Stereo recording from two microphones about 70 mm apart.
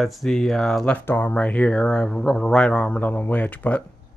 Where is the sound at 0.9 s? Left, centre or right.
Left.